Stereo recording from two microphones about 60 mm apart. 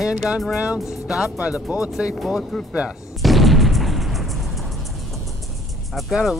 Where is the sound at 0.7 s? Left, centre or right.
Centre.